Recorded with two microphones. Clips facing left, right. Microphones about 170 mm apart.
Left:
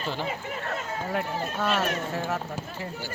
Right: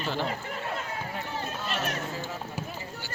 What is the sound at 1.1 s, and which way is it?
Speech, 65° left (ahead or behind).